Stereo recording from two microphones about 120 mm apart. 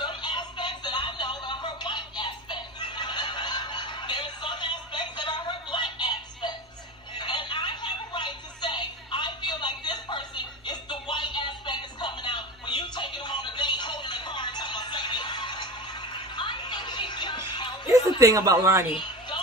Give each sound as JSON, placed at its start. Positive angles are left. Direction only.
{"t": 0.0, "sound": "music", "side_deg": 40}
{"t": 18.2, "sound": "speech", "side_deg": -30}
{"t": 18.9, "sound": "a sound", "side_deg": 40}